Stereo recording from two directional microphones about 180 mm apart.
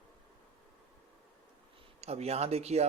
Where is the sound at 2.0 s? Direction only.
35° right (ahead or behind).